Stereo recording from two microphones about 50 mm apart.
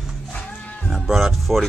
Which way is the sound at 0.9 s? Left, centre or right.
Centre.